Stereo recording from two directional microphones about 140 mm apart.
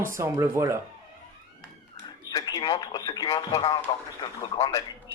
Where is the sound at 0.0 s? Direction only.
20° right (ahead or behind).